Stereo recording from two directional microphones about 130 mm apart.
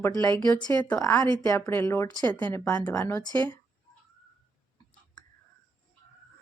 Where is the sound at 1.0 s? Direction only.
25° left (ahead or behind).